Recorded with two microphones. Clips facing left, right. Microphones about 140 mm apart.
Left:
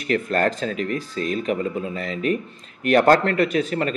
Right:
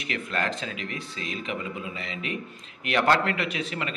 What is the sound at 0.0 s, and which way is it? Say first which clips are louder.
Speech: left 9 dB; 45° left (ahead or behind).